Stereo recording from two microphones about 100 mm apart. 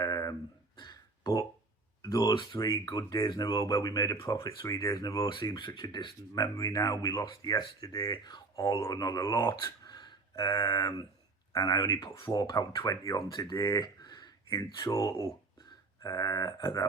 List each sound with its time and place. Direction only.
0.0 s a sound: 35° left (ahead or behind)
2.3 s speech: 50° left (ahead or behind)
5.5 s speech: 50° left (ahead or behind)
6.4 s speech: 35° left (ahead or behind)
8.5 s speech: 35° left (ahead or behind)
13.2 s speech: 45° left (ahead or behind)
13.6 s speech: 35° left (ahead or behind)